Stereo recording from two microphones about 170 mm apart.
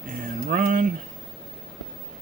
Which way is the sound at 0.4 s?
55° right (ahead or behind).